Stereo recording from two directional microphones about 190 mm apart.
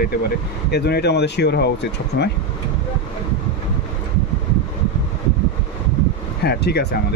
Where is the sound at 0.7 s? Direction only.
60° left (ahead or behind).